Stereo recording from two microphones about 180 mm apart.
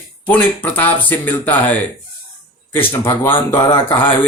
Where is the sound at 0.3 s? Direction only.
10° left (ahead or behind).